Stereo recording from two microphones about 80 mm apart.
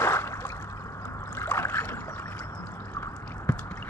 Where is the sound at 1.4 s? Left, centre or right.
Left.